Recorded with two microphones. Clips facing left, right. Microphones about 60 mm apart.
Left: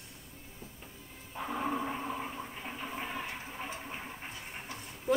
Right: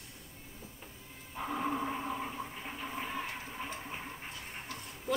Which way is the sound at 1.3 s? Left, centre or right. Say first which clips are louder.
Even; centre.